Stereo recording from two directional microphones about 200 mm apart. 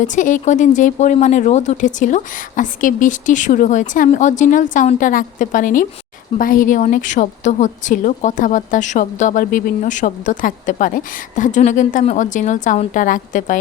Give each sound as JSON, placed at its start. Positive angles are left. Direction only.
{"t": 0.0, "sound": "a woman's voice", "side_deg": 40}